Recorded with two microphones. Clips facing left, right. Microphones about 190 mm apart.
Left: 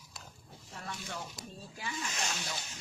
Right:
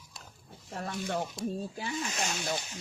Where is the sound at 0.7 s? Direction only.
50° right (ahead or behind).